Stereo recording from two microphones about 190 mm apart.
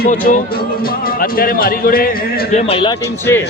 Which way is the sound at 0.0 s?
45° left (ahead or behind).